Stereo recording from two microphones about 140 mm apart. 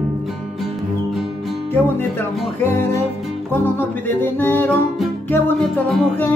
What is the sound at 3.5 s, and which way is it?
Music, 15° left (ahead or behind).